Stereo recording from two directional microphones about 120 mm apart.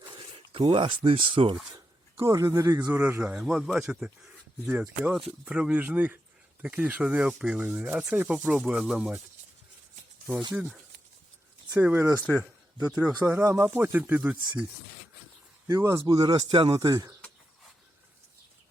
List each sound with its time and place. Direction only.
0.6 s speech: 45° right (ahead or behind)
1.7 s speech: 30° right (ahead or behind)
2.9 s speech: 15° right (ahead or behind)
10.5 s speech: 15° right (ahead or behind)
11.8 s speech: 15° right (ahead or behind)
13.3 s speech: 20° right (ahead or behind)
15.6 s speech: 25° right (ahead or behind)